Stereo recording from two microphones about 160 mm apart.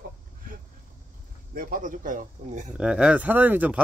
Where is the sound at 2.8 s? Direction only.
5° right (ahead or behind).